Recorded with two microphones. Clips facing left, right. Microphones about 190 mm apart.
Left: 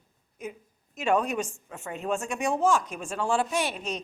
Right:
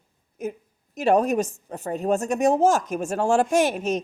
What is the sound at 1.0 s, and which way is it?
A woman's voice, 40° right (ahead or behind).